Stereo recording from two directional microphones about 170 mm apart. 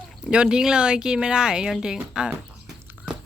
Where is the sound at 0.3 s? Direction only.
5° right (ahead or behind).